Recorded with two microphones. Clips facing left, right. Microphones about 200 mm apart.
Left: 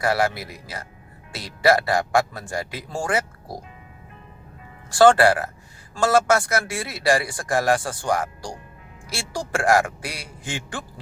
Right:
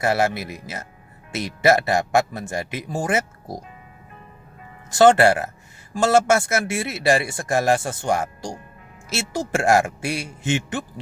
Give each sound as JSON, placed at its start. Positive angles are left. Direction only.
{"t": 0.0, "sound": "a man's voice", "side_deg": -25}
{"t": 4.9, "sound": "a man's voice", "side_deg": -20}